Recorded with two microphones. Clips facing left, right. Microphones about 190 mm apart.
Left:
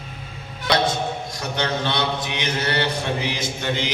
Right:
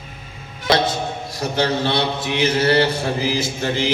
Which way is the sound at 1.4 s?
30° right (ahead or behind).